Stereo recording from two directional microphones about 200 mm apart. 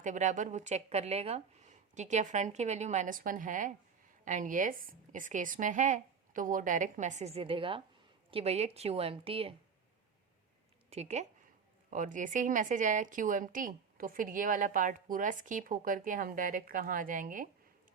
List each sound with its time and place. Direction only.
0.0 s a woman's voice: 40° right (ahead or behind)
10.8 s speech: 35° right (ahead or behind)